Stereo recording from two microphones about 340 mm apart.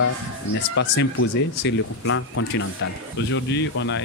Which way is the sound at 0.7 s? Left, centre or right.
Left.